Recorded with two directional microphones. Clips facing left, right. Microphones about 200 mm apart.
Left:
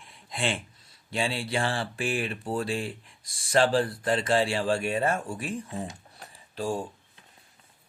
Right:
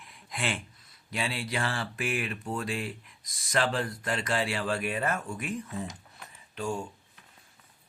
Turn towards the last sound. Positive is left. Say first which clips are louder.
# left 3 dB
turn(degrees=35)  # may be behind; listen again after turning